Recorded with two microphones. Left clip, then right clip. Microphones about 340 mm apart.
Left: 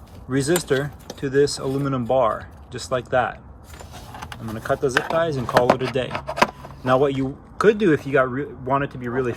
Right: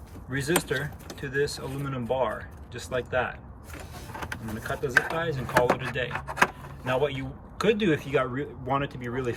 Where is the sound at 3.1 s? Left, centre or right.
Centre.